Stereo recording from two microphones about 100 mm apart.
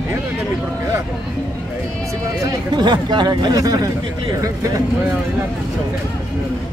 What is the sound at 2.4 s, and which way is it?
Speech, 40° right (ahead or behind).